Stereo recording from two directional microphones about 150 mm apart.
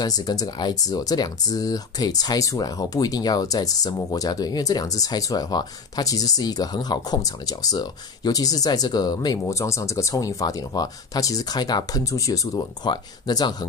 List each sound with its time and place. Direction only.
0.0 s speech: 25° left (ahead or behind)